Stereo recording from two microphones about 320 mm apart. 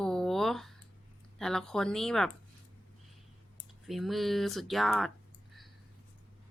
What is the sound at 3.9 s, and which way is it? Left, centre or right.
A woman's voice, centre.